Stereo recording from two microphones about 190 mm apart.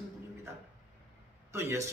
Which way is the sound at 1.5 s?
15° right (ahead or behind).